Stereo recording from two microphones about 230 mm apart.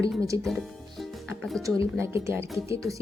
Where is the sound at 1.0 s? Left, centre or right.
Centre.